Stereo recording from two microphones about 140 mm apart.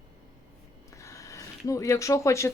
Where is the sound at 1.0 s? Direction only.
20° left (ahead or behind).